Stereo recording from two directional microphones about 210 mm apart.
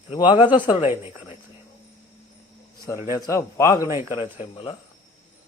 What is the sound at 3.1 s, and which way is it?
Speech, 15° left (ahead or behind).